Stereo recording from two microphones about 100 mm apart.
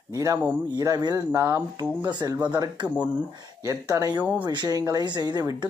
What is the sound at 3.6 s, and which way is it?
Speech, 35° right (ahead or behind).